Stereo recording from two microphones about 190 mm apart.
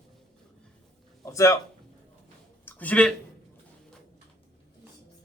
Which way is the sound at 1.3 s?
15° left (ahead or behind).